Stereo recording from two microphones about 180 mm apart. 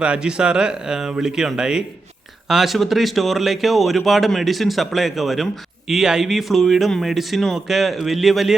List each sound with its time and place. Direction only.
0.0 s speech: 5° right (ahead or behind)